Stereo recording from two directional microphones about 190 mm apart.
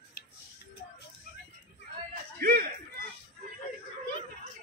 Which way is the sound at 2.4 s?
50° right (ahead or behind).